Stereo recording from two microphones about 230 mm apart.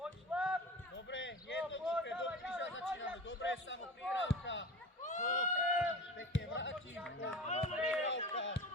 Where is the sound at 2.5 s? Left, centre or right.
Left.